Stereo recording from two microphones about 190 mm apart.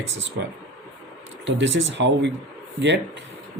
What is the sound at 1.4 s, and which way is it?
Speech, 75° right (ahead or behind).